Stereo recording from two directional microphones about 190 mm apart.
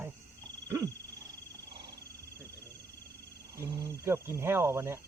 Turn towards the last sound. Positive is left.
turn(degrees=-15)  # may be behind; listen again after turning